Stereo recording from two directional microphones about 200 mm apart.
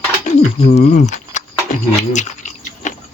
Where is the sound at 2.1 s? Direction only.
35° left (ahead or behind).